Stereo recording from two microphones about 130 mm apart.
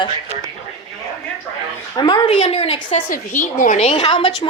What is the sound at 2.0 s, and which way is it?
Speech, 35° left (ahead or behind).